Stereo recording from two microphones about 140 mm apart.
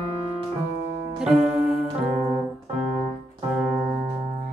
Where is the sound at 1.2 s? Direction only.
5° right (ahead or behind).